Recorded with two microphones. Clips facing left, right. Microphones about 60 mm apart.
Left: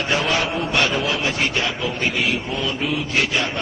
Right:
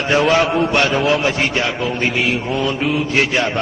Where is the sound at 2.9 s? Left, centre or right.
Right.